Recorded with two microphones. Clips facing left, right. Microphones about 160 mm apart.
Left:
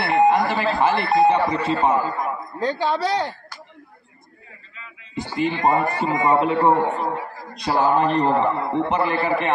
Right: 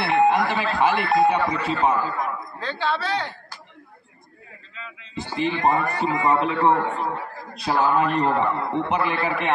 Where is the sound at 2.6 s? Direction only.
15° left (ahead or behind).